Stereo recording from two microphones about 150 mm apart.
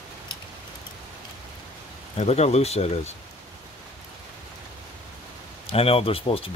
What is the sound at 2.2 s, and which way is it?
Speech, 45° left (ahead or behind).